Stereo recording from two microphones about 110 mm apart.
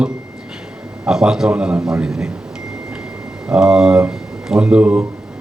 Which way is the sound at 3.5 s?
5° right (ahead or behind).